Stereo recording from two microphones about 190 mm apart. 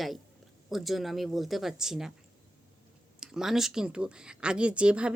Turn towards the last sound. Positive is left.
turn(degrees=-5)  # may be behind; listen again after turning